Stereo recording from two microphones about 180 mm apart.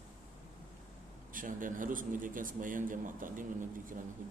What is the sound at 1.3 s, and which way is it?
A man's voice, 50° right (ahead or behind).